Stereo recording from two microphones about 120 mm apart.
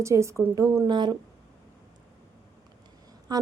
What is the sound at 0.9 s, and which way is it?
Speech, 40° right (ahead or behind).